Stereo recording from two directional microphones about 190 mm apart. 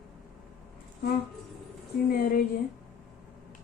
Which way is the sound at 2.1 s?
50° left (ahead or behind).